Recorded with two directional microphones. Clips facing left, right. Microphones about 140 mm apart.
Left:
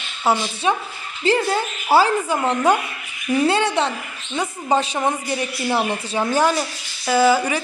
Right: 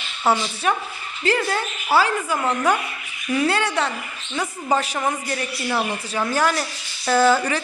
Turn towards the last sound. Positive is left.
turn(degrees=10)  # may be behind; listen again after turning